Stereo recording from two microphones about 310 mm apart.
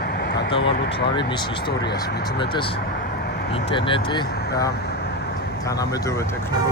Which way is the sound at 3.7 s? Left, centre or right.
Centre.